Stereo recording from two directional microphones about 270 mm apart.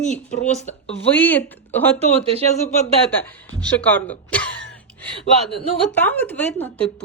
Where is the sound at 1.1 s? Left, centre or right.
Centre.